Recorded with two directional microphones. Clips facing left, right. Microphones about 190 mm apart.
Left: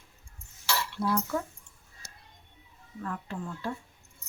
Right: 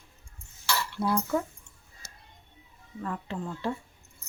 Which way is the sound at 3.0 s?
20° right (ahead or behind).